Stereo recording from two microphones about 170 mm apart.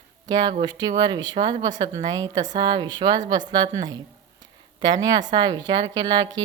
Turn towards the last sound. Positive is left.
turn(degrees=-25)  # may be behind; listen again after turning